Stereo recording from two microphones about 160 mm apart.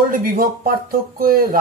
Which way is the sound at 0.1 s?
60° right (ahead or behind).